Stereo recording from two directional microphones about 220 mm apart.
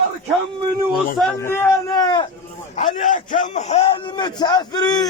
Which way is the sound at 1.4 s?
10° left (ahead or behind).